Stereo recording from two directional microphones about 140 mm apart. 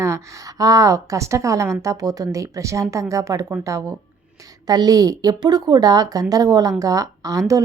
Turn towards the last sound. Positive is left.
turn(degrees=-25)  # may be behind; listen again after turning